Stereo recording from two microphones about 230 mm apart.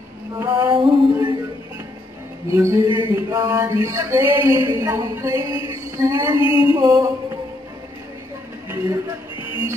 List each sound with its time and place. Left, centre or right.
0.4 s female singing: centre
2.5 s a man's voice: centre
2.9 s speech: left
3.2 s a man's voice: centre
4.4 s speech: left
4.6 s a man's voice: centre
5.7 s music: centre
6.4 s speech: left
6.7 s a man's voice: centre
8.6 s a sound: centre
9.4 s music: left